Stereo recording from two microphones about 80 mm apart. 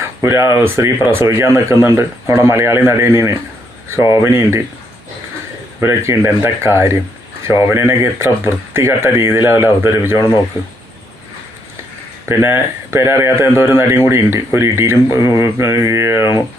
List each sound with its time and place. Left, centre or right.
0.0 s speech: right
5.8 s a man's voice: right
12.3 s speech: right